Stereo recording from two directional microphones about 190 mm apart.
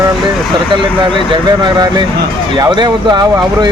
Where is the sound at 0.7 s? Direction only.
25° right (ahead or behind).